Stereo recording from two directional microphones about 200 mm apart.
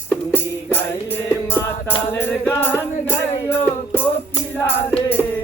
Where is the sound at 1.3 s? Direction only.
10° left (ahead or behind).